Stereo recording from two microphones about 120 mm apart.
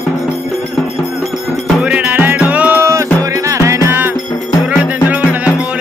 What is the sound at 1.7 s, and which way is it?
Music, 10° right (ahead or behind).